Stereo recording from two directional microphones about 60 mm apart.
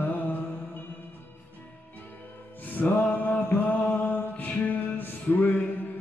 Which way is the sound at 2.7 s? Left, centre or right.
Left.